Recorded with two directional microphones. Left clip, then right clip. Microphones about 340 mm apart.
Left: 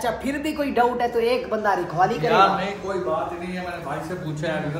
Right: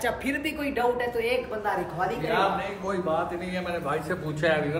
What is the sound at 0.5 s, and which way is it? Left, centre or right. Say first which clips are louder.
Speech: left 7 dB; centre.